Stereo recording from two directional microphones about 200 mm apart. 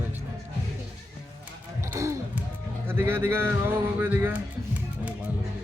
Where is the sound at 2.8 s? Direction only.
10° right (ahead or behind).